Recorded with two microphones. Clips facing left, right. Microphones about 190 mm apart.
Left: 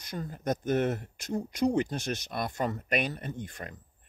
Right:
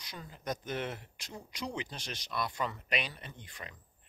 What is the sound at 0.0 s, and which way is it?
Speech, 50° left (ahead or behind).